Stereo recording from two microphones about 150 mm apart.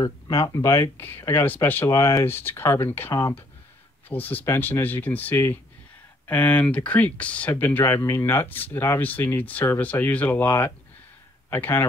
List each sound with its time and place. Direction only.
0.5 s speech: 20° left (ahead or behind)